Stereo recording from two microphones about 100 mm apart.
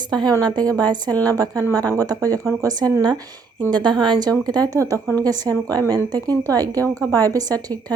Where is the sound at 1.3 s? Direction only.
35° right (ahead or behind).